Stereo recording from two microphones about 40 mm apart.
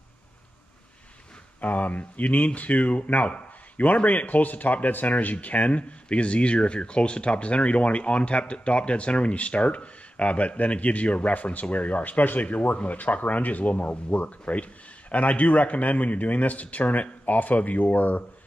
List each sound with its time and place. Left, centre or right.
1.6 s speech: left